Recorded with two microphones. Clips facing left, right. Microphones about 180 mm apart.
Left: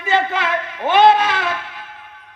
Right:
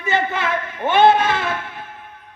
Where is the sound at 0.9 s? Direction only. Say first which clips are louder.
Left 1 dB; 50° right (ahead or behind).